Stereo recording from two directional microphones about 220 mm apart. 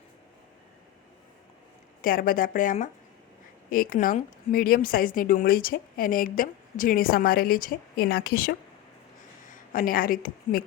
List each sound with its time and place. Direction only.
2.0 s a woman's voice: 40° left (ahead or behind)